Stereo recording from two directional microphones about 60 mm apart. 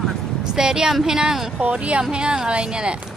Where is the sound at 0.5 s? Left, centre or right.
Centre.